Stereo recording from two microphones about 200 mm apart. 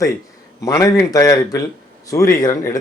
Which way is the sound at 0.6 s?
15° left (ahead or behind).